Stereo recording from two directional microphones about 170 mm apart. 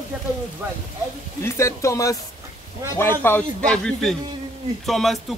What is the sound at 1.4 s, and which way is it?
Speech, 15° left (ahead or behind).